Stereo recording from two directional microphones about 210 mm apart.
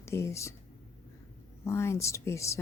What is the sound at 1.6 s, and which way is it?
Speech, 15° left (ahead or behind).